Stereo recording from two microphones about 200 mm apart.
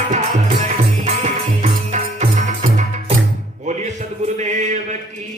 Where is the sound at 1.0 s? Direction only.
35° right (ahead or behind).